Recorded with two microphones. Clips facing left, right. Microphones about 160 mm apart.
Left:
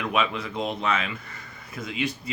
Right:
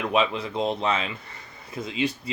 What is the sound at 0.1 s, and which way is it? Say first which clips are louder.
Speech: right 3 dB; 30° right (ahead or behind).